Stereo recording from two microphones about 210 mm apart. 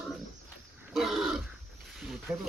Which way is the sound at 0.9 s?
Centre (ahead or behind).